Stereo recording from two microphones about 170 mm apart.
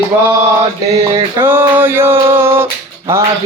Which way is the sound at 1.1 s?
15° right (ahead or behind).